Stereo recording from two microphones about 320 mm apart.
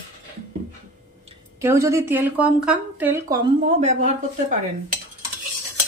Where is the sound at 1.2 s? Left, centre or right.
Centre.